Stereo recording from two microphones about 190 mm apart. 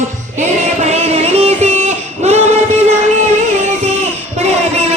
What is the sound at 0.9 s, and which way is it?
Music, 35° right (ahead or behind).